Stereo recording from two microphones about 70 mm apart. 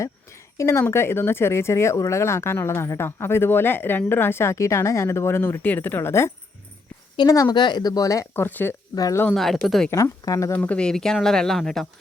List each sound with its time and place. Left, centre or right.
0.5 s speech: left
7.4 s speech: left
8.3 s speech: left
9.3 s speech: centre
9.9 s speech: left
10.5 s speech: centre